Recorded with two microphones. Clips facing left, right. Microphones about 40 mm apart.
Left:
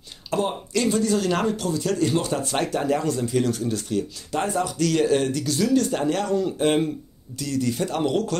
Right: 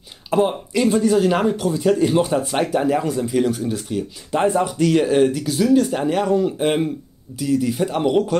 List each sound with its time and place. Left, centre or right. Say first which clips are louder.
0.3 s speech: right 6 dB; centre